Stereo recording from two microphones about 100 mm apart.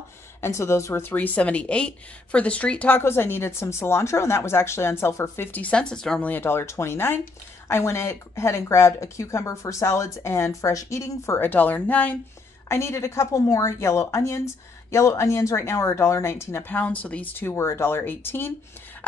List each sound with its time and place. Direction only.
0.4 s speech: 30° left (ahead or behind)
1.1 s speech: 15° left (ahead or behind)
12.6 s speech: 25° left (ahead or behind)